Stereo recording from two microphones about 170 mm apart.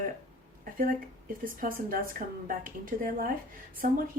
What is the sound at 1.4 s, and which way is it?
Speech, 55° right (ahead or behind).